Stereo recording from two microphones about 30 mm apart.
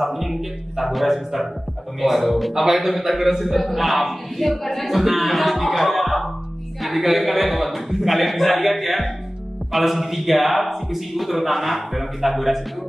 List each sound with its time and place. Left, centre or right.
0.0 s a man's voice: centre
2.5 s a man's voice: centre